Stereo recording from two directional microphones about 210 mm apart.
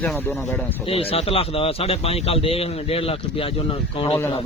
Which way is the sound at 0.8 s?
25° left (ahead or behind).